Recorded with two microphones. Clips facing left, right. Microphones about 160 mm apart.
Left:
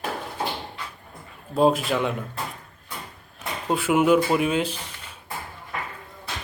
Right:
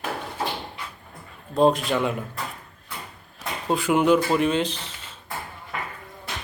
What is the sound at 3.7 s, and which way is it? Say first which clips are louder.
Speech: even; 5° left (ahead or behind).